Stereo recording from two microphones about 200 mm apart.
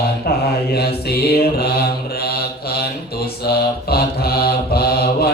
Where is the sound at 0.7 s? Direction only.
50° left (ahead or behind).